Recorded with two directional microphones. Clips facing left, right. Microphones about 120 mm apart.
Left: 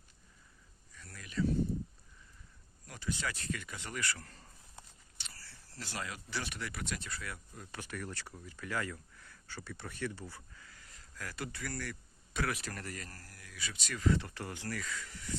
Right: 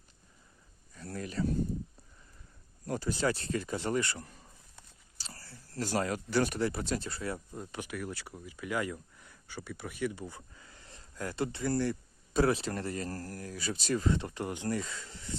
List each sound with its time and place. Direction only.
0.9 s a sound: 35° right (ahead or behind)
2.8 s speech: 40° right (ahead or behind)
5.1 s speech: 40° right (ahead or behind)
7.9 s speech: 10° right (ahead or behind); by 13.1 s 25° right (ahead or behind)
13.1 s speech: 40° right (ahead or behind)